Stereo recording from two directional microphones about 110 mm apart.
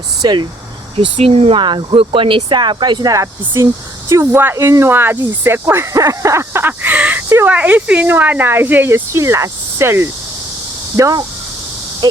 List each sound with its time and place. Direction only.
0.2 s speech: 45° right (ahead or behind)
0.9 s speech: 65° right (ahead or behind)
1.5 s speech: 45° right (ahead or behind)
3.1 s speech: 30° right (ahead or behind)